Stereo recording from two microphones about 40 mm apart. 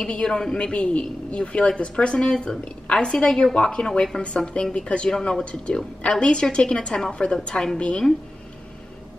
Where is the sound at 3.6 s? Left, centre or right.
Left.